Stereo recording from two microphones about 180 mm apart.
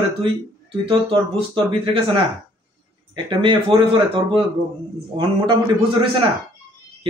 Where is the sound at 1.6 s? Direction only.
30° right (ahead or behind).